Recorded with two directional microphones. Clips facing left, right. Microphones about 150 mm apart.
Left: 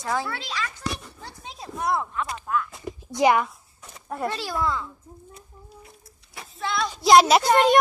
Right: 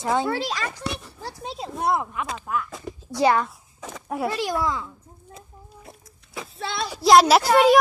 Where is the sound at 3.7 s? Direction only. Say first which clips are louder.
Right 10 dB; 90° right.